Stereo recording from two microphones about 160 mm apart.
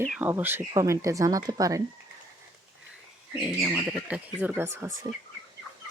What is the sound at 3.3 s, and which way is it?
Speech, 5° right (ahead or behind).